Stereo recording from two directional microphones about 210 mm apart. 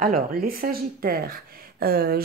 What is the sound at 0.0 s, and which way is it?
Speech, 40° right (ahead or behind).